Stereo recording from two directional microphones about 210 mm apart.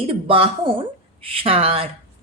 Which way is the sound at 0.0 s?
25° right (ahead or behind).